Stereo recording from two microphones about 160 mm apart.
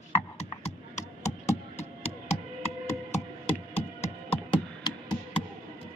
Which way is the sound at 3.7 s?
40° left (ahead or behind).